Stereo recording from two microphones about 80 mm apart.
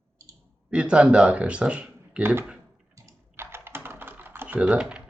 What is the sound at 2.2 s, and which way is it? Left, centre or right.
Speech, right.